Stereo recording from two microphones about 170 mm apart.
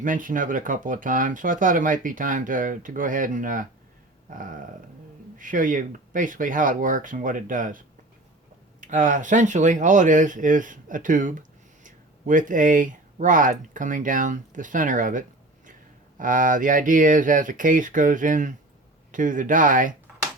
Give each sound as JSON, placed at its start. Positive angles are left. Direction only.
{"t": 0.0, "sound": "speech", "side_deg": -50}
{"t": 8.8, "sound": "speech", "side_deg": -50}